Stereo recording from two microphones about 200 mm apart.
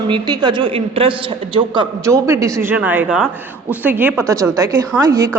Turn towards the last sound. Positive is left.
turn(degrees=-15)  # may be behind; listen again after turning